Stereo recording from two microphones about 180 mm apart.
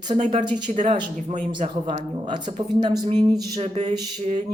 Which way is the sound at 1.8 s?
25° right (ahead or behind).